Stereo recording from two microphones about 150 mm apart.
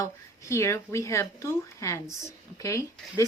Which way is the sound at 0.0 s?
20° left (ahead or behind).